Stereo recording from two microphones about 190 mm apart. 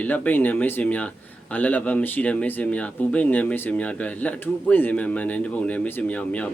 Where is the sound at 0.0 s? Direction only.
10° left (ahead or behind).